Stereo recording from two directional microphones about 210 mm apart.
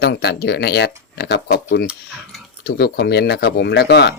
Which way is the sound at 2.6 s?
50° left (ahead or behind).